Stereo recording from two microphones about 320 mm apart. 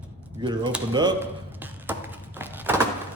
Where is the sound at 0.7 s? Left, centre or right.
Centre.